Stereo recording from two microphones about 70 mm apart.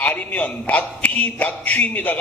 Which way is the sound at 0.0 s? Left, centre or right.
Left.